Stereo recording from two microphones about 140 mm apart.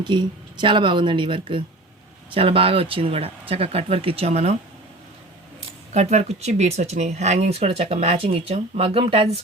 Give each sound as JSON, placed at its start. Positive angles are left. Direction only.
{"t": 0.0, "sound": "speech", "side_deg": -35}
{"t": 5.9, "sound": "speech", "side_deg": -55}